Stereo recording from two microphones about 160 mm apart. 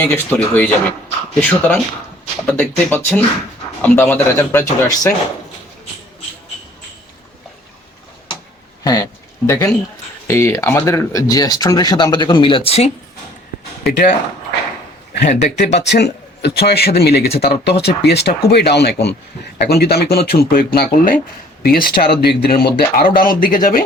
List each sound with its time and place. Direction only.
0.0 s speech: 10° left (ahead or behind)
8.8 s speech: 20° left (ahead or behind); by 12.9 s 40° left (ahead or behind)
13.8 s speech: 80° left
15.3 s speech: 45° left (ahead or behind)
15.5 s speech: 90° left
19.5 s speech: 80° left; by 23.8 s 60° left (ahead or behind)